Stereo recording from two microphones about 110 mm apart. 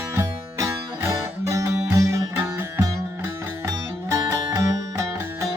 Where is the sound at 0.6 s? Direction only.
30° right (ahead or behind).